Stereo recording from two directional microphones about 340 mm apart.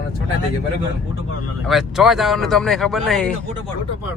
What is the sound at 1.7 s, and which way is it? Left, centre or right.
Speech, centre.